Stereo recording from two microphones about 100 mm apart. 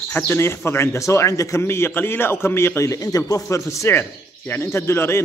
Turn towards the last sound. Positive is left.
turn(degrees=25)  # may be behind; listen again after turning